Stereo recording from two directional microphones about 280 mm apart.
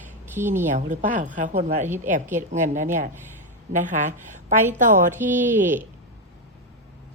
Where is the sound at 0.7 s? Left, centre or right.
Right.